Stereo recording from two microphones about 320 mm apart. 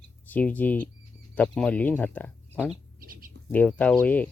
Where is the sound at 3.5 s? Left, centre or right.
Centre.